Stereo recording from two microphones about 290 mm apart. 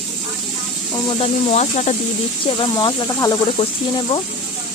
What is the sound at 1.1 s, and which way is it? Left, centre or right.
Speech, left.